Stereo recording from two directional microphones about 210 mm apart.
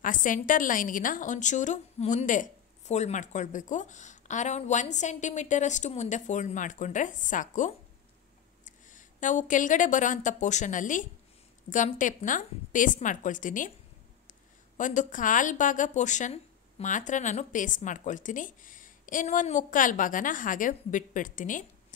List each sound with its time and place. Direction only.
0.0 s a woman's voice: 40° left (ahead or behind)
14.8 s a woman's voice: 40° left (ahead or behind)